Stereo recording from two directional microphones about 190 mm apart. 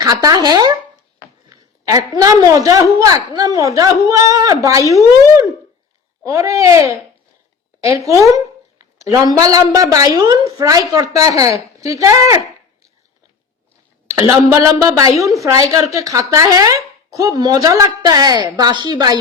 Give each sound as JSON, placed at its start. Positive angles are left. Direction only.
{"t": 0.0, "sound": "a woman's voice", "side_deg": -20}
{"t": 6.2, "sound": "a woman's voice", "side_deg": -15}
{"t": 14.1, "sound": "a woman's voice", "side_deg": -15}